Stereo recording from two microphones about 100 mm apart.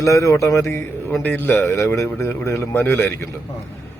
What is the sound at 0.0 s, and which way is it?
Speech, 30° left (ahead or behind).